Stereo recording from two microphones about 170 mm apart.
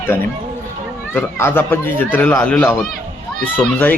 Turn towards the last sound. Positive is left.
turn(degrees=10)  # may be behind; listen again after turning